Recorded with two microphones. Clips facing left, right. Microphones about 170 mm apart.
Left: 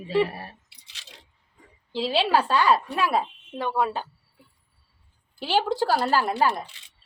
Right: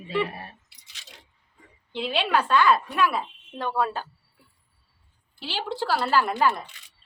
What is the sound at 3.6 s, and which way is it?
Speech, 15° left (ahead or behind).